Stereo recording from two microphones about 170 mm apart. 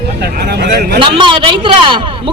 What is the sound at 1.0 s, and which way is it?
Speech, 30° right (ahead or behind).